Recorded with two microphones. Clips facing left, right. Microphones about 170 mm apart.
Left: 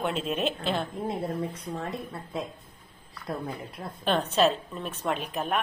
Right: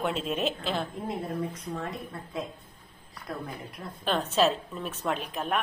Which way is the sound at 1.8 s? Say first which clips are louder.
Left 1 dB; 30° left (ahead or behind).